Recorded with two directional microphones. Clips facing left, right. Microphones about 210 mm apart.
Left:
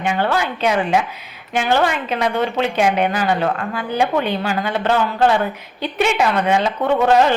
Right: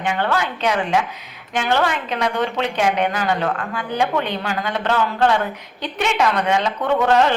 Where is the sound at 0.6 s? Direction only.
10° left (ahead or behind).